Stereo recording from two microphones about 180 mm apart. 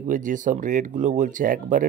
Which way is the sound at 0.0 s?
45° right (ahead or behind).